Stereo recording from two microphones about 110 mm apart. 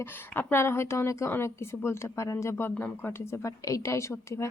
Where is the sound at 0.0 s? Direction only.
20° left (ahead or behind).